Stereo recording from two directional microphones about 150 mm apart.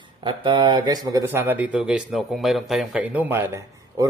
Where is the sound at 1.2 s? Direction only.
10° right (ahead or behind).